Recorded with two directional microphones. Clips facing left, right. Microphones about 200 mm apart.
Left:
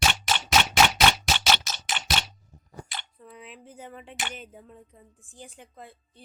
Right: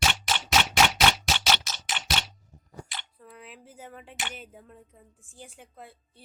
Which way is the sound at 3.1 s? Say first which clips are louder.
Left 2 dB; centre (ahead or behind).